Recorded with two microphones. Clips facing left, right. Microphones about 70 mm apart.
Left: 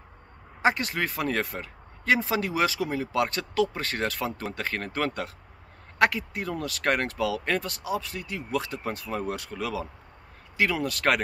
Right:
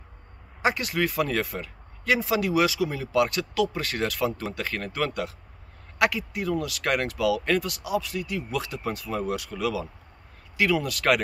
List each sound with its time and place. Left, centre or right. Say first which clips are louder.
0.6 s speech: even; left